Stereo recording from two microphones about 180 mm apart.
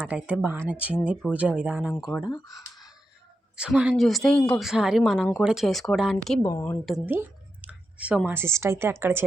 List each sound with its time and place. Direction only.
0.0 s speech: 10° right (ahead or behind)
1.9 s a woman's voice: 5° left (ahead or behind)
2.3 s speech: 20° left (ahead or behind)
3.5 s a woman's voice: 5° right (ahead or behind)
6.4 s a woman's voice: 15° left (ahead or behind)
6.8 s speech: 5° right (ahead or behind)